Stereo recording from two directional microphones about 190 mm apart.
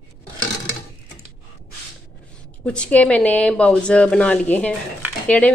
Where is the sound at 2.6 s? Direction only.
5° left (ahead or behind).